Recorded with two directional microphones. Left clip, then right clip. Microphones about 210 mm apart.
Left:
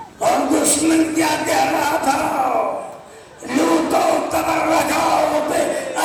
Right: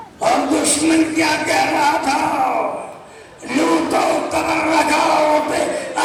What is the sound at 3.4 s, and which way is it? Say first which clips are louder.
Music: even; 55° left (ahead or behind).